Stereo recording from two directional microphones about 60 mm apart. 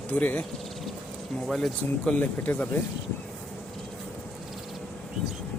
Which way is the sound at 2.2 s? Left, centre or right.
Left.